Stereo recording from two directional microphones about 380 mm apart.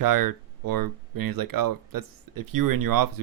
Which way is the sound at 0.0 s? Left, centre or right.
Right.